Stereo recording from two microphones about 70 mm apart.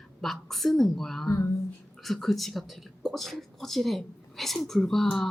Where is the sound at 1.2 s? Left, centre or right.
Left.